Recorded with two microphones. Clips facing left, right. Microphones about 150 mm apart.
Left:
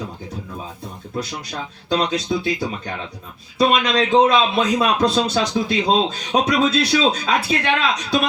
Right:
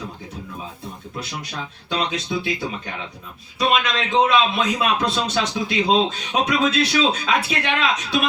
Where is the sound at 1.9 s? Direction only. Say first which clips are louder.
Left 5 dB; 35° left (ahead or behind).